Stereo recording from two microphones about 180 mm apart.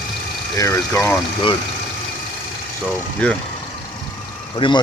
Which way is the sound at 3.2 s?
5° left (ahead or behind).